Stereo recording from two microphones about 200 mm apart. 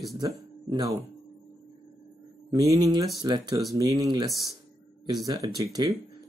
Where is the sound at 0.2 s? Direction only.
20° right (ahead or behind).